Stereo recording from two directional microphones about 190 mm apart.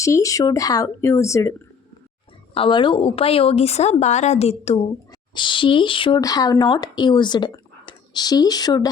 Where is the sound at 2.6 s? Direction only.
25° left (ahead or behind).